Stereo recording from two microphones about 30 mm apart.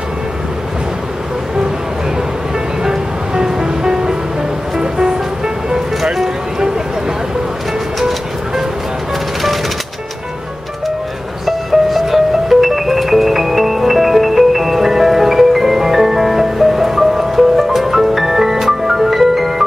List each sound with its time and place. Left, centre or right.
2.8 s music: right
11.4 s music: centre